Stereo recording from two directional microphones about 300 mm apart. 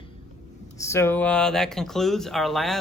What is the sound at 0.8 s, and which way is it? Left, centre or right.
Speech, centre.